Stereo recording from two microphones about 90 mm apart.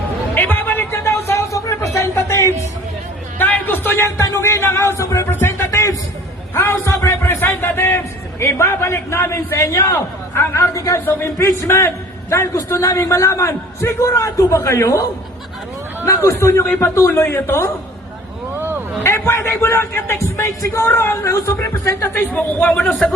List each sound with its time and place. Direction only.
0.3 s a sound: 20° left (ahead or behind)
3.3 s a man's voice: 20° left (ahead or behind)
16.0 s a man's voice: 30° left (ahead or behind)
16.6 s a man's voice: 20° left (ahead or behind)
16.9 s a man's voice: 30° left (ahead or behind)
18.5 s a sound: 25° right (ahead or behind)
19.0 s a man's voice: 30° left (ahead or behind)
22.3 s a man's voice: 15° left (ahead or behind)